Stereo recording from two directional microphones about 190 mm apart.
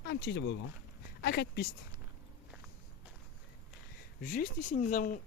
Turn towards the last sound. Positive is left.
turn(degrees=45)  # may be behind; listen again after turning